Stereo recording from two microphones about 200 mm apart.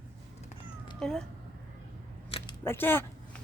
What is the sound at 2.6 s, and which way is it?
Speech, 10° left (ahead or behind).